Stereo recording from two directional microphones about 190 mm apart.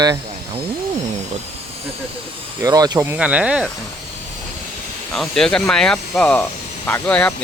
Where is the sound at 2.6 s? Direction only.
20° right (ahead or behind).